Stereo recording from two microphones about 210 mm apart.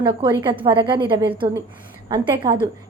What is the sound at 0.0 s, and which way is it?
A woman's voice, 20° right (ahead or behind).